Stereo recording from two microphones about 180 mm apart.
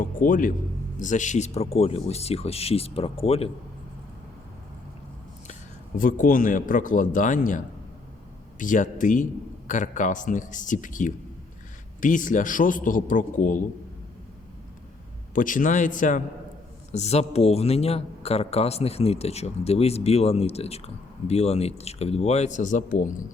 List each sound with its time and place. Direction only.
0.0 s a man's voice: 50° left (ahead or behind); by 3.5 s 30° left (ahead or behind)
6.0 s a man's voice: 50° left (ahead or behind)
15.4 s a man's voice: 45° left (ahead or behind)